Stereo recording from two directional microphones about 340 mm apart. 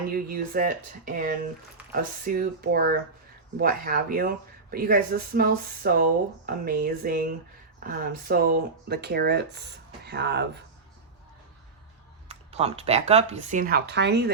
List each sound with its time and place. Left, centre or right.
0.1 s speech: right
12.5 s speech: centre